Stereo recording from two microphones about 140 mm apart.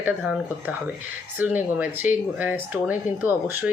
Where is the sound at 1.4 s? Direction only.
15° right (ahead or behind).